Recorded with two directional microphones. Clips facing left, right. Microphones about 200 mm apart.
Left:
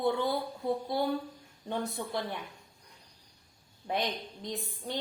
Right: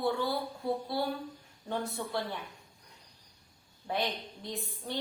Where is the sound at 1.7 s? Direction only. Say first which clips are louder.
Left 1 dB; 15° left (ahead or behind).